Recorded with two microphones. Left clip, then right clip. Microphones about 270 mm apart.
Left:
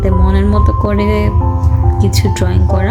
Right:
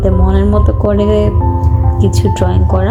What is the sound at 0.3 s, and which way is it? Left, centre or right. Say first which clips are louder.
Music: right 2 dB; centre.